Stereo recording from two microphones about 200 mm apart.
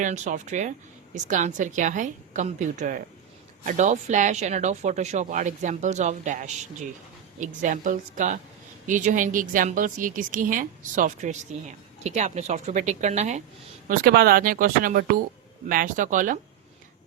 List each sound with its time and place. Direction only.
0.0 s a woman's voice: 40° right (ahead or behind)
13.8 s a woman's voice: 45° right (ahead or behind)